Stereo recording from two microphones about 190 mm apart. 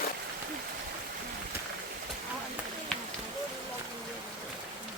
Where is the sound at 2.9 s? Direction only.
5° left (ahead or behind).